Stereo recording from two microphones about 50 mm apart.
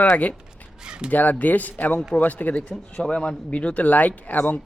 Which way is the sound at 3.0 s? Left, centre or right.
Centre.